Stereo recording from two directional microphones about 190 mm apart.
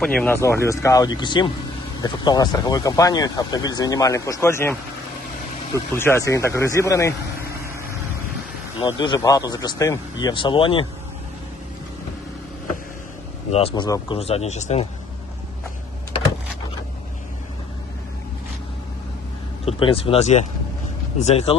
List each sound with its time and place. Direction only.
0.0 s speech: 5° left (ahead or behind)
0.4 s speech: 15° left (ahead or behind)
8.8 s speech: 25° left (ahead or behind)
13.5 s speech: 30° left (ahead or behind)
13.8 s speech: 20° left (ahead or behind)
14.2 s speech: 30° left (ahead or behind)
19.6 s speech: 30° left (ahead or behind)